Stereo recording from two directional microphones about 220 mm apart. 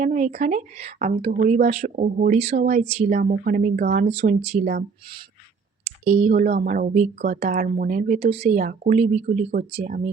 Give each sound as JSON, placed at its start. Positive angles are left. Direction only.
{"t": 0.0, "sound": "speech", "side_deg": -35}
{"t": 4.1, "sound": "speech", "side_deg": -30}
{"t": 5.8, "sound": "speech", "side_deg": -30}